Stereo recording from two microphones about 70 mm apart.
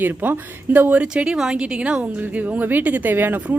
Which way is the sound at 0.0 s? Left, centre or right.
Right.